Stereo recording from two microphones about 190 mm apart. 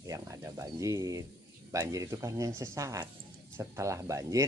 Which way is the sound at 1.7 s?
15° right (ahead or behind).